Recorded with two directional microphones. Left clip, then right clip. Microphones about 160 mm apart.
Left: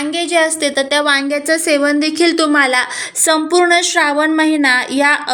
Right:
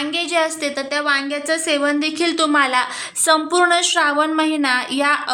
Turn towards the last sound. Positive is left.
turn(degrees=15)  # may be behind; listen again after turning